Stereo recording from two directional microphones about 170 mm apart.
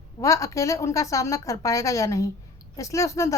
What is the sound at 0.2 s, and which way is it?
A woman's voice, 20° left (ahead or behind).